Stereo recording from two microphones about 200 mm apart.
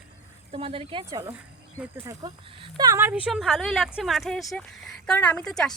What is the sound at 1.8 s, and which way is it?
A woman's voice, 15° right (ahead or behind).